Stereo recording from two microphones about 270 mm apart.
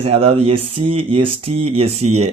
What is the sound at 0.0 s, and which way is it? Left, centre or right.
Speech, right.